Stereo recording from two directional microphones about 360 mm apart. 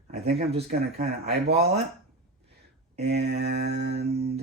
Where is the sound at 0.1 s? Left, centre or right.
Centre.